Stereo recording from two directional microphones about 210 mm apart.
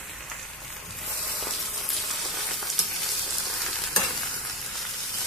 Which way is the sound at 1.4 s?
Centre (ahead or behind).